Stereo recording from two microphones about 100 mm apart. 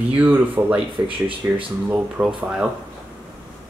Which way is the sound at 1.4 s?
30° right (ahead or behind).